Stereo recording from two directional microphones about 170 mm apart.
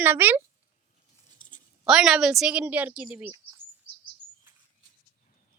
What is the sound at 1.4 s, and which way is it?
Writing, 55° left (ahead or behind).